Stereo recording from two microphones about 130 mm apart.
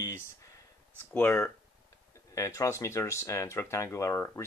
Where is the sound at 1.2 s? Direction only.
20° left (ahead or behind).